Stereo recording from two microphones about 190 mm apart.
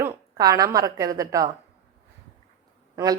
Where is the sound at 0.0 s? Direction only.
15° right (ahead or behind).